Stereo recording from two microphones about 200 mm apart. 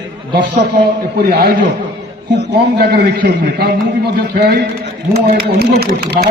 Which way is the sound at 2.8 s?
50° right (ahead or behind).